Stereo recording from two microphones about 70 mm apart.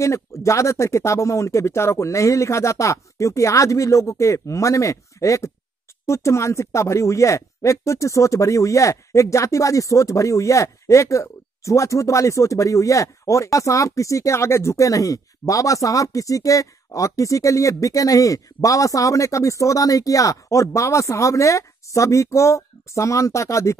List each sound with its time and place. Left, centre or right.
0.0 s speech: left